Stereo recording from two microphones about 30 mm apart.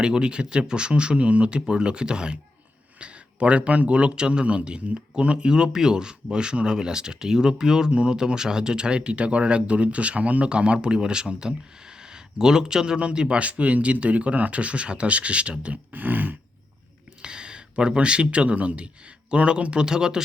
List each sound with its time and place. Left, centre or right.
0.0 s speech: right
3.0 s a man's voice: right
10.4 s speech: right
13.4 s speech: right
15.7 s speech: right
17.2 s speech: right
19.3 s speech: right